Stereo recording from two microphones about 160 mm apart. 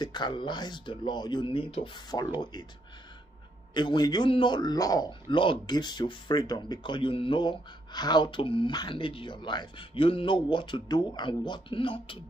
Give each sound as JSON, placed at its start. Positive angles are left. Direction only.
{"t": 0.0, "sound": "a man's voice", "side_deg": 30}
{"t": 3.7, "sound": "a man's voice", "side_deg": 30}